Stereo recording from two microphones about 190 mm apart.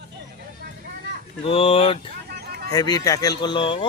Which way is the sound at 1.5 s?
30° left (ahead or behind).